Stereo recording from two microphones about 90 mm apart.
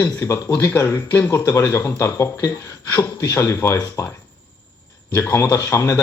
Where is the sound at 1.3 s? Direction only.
35° left (ahead or behind).